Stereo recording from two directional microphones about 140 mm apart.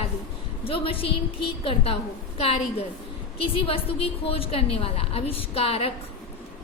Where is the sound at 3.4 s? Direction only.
40° left (ahead or behind).